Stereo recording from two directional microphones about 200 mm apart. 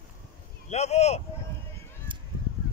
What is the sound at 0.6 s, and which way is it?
Speech, 35° left (ahead or behind).